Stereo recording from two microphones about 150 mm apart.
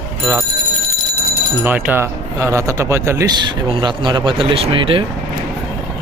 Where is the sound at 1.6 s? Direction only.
15° right (ahead or behind); by 5.0 s 35° right (ahead or behind).